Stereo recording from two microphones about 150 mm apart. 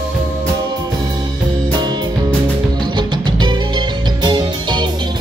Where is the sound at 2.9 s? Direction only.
30° right (ahead or behind).